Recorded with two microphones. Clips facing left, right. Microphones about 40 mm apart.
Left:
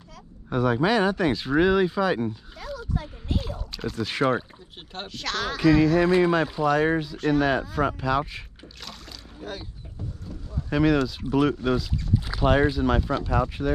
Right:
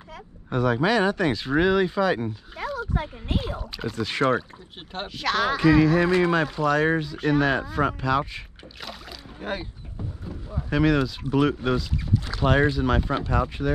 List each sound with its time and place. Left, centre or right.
0.5 s speech: centre
2.5 s a sound: right
3.3 s speech: centre
4.9 s speech: centre
9.4 s rowboat: right
10.7 s speech: centre